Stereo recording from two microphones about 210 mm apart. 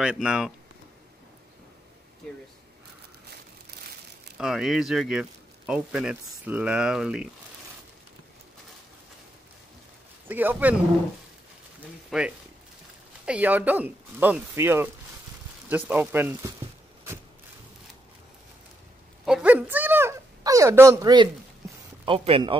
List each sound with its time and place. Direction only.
0.0 s speech: 5° right (ahead or behind)
3.7 s crumpling: 55° right (ahead or behind)
4.4 s speech: centre (ahead or behind)
10.2 s speech: 10° right (ahead or behind)
12.1 s speech: 5° right (ahead or behind)
19.2 s a sound: 5° right (ahead or behind)
22.0 s speech: 25° right (ahead or behind)